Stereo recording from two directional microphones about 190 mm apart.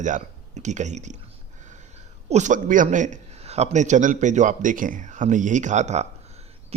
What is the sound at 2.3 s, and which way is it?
A man's voice, 40° right (ahead or behind).